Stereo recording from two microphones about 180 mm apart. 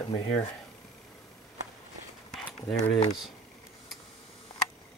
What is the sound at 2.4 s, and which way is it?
Speech, 25° left (ahead or behind).